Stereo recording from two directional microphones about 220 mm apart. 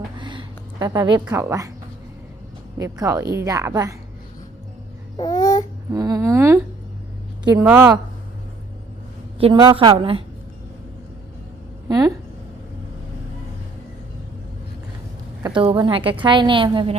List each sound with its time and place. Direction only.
0.2 s a sound: 20° right (ahead or behind)
1.3 s a woman's voice: 15° right (ahead or behind)
2.7 s a woman's voice: 15° right (ahead or behind)
5.1 s babbling: 15° left (ahead or behind)
5.9 s a woman's voice: 15° right (ahead or behind)
7.6 s a woman's voice: 10° right (ahead or behind)
9.4 s a woman's voice: 20° right (ahead or behind)
11.9 s speech: 15° right (ahead or behind)
15.4 s a woman's voice: 20° right (ahead or behind)